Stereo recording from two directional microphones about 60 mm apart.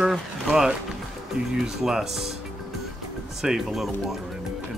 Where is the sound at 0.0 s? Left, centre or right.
Centre.